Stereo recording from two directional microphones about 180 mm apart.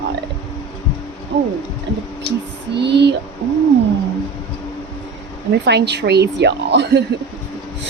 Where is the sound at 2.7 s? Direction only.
75° right (ahead or behind).